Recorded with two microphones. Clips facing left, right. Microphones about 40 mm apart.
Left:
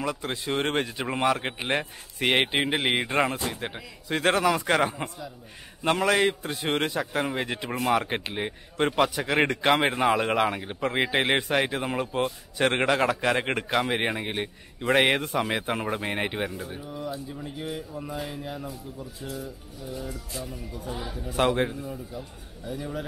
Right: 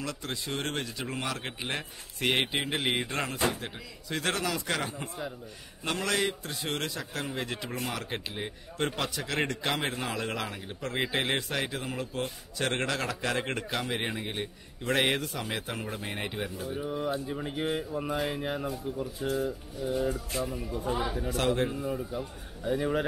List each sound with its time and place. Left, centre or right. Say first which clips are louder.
0.0 s speech: left 6 dB; centre
16.8 s speech: right 6 dB; right
20.4 s speech: right 4 dB; centre
20.8 s speech: right 5 dB; right
21.4 s speech: left 5 dB; left
21.8 s speech: right 4 dB; right